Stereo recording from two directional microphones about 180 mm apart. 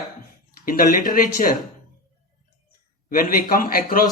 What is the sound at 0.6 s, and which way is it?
Speech, 50° left (ahead or behind).